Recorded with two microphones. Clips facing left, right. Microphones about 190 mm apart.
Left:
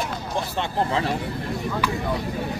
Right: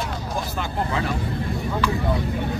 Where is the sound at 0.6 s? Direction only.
30° left (ahead or behind).